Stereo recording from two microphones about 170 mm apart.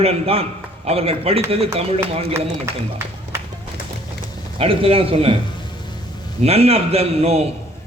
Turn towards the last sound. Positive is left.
turn(degrees=-35)  # may be behind; listen again after turning